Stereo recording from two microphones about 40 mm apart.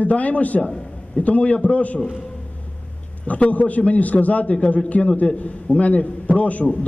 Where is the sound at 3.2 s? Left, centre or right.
Left.